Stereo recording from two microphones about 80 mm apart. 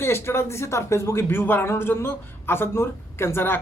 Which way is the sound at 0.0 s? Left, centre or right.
Left.